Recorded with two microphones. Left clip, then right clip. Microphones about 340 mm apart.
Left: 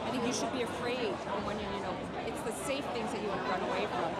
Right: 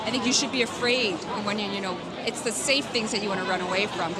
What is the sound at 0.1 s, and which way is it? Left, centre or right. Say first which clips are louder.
Speech: right 10 dB; right.